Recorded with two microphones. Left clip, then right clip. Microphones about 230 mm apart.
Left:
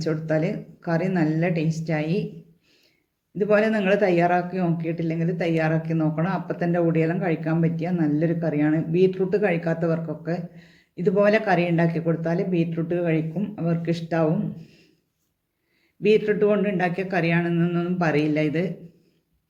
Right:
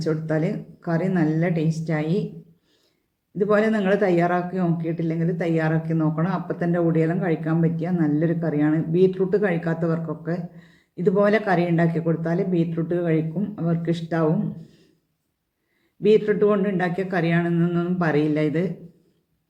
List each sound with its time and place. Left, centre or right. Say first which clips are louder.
0.0 s a man's voice: even; centre
3.3 s a man's voice: even; centre
16.0 s a man's voice: right 1 dB; centre